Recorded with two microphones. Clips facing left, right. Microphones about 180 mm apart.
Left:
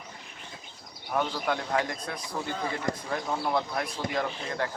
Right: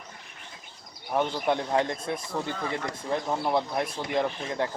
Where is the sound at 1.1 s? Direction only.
20° right (ahead or behind).